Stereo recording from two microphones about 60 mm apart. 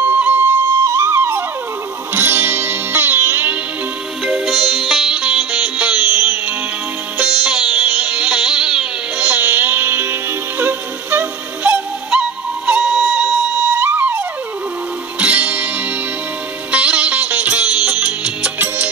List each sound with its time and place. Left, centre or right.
0.0 s music: right
0.8 s music: right
4.2 s sitar: centre
5.1 s music: centre
6.0 s music: right
7.2 s music: centre
9.2 s music: right
11.7 s music: right
13.7 s music: right
16.7 s music: right